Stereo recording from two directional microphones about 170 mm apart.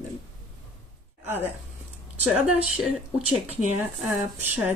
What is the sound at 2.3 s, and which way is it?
Speech, 5° right (ahead or behind).